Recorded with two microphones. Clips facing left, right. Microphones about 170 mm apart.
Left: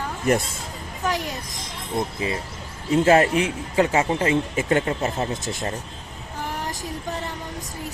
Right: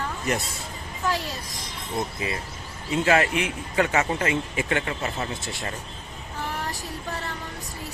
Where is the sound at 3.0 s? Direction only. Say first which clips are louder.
Left 4 dB; 35° left (ahead or behind).